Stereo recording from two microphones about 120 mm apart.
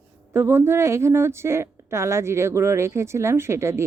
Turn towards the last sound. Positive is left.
turn(degrees=-20)  # may be behind; listen again after turning